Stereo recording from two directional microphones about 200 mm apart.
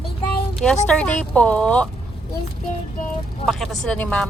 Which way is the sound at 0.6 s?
5° left (ahead or behind).